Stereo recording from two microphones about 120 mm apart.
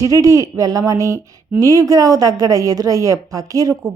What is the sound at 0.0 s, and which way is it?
Speech, 25° right (ahead or behind).